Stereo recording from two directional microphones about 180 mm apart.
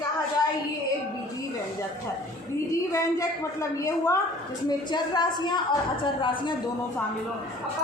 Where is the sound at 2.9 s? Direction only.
15° left (ahead or behind).